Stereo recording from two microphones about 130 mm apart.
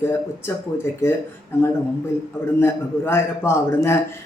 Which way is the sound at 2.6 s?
15° left (ahead or behind).